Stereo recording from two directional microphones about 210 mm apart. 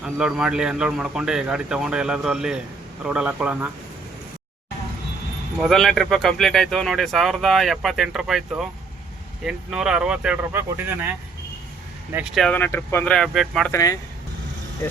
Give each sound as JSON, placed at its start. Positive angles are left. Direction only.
{"t": 0.0, "sound": "speech", "side_deg": -5}
{"t": 5.5, "sound": "speech", "side_deg": 0}
{"t": 12.1, "sound": "speech", "side_deg": 0}
{"t": 13.7, "sound": "speech", "side_deg": 15}